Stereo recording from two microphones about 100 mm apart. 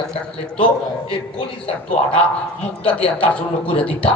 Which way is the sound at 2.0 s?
90° left.